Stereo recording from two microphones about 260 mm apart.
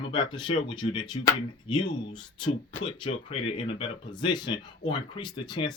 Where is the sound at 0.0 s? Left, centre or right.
Centre.